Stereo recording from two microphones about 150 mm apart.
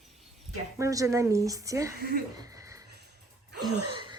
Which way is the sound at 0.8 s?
20° right (ahead or behind).